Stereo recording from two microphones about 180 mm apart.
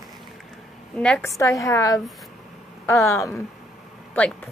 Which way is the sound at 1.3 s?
15° left (ahead or behind).